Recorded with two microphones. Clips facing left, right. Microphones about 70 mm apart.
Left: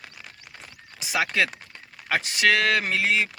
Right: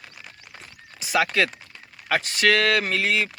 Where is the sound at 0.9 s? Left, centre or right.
Centre.